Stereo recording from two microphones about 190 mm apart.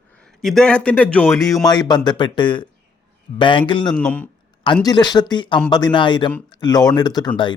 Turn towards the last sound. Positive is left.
turn(degrees=20)  # may be behind; listen again after turning